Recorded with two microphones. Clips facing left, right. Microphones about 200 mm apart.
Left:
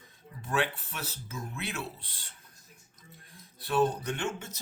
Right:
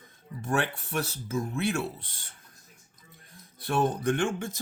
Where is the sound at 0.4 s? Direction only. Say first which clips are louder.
Right 2 dB; 50° right (ahead or behind).